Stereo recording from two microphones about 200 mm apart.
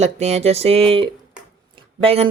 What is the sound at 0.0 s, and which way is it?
Speech, 35° right (ahead or behind).